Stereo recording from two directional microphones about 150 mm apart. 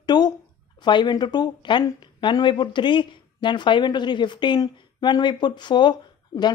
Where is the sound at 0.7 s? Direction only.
30° left (ahead or behind).